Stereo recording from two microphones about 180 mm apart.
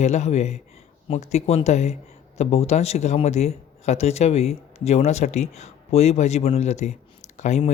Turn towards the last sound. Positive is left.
turn(degrees=40)  # may be behind; listen again after turning